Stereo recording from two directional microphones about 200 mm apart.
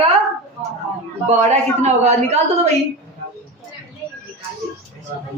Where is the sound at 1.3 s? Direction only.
35° right (ahead or behind).